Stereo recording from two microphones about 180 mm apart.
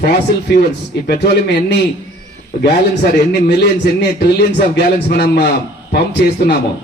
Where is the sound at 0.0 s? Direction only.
65° left (ahead or behind).